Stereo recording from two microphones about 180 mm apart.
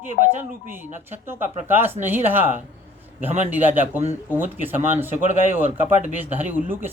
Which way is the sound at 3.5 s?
10° right (ahead or behind).